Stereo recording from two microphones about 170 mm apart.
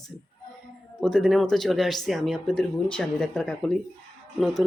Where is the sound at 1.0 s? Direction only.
Centre (ahead or behind).